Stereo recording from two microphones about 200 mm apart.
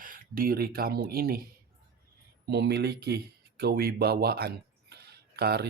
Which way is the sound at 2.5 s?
55° right (ahead or behind).